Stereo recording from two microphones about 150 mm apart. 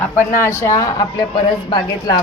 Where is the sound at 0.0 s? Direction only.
15° left (ahead or behind).